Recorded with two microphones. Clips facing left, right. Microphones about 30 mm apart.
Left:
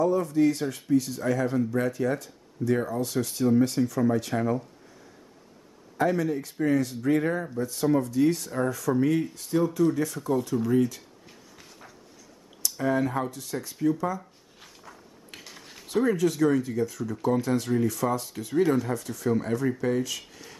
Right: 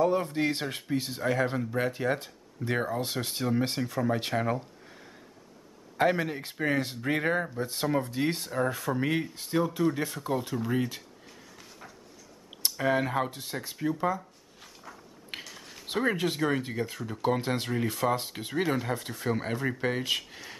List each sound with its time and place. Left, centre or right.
0.0 s speech: right
3.4 s speech: right
3.7 s speech: right
5.9 s speech: right
11.2 s a sound: centre
12.7 s speech: right
15.4 s a sound: centre
15.9 s speech: right
20.2 s speech: right